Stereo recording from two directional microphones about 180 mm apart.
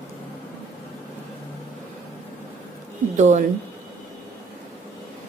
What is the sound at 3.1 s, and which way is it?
Speech, 40° right (ahead or behind).